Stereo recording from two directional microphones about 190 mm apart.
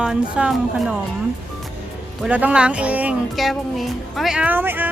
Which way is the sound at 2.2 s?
5° right (ahead or behind).